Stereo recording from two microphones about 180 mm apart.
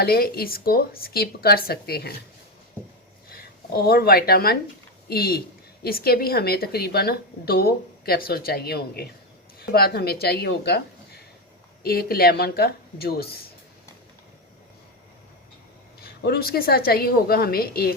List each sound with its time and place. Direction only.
0.0 s a woman's voice: 60° left (ahead or behind)
3.3 s a woman's voice: 55° left (ahead or behind)
16.0 s a woman's voice: 60° left (ahead or behind)